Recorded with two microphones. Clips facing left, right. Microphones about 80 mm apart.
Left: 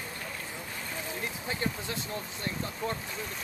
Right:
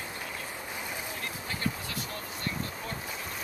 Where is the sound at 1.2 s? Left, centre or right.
Left.